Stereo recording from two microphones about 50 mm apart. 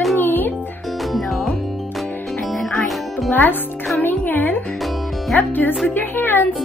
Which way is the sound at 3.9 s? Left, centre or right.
Left.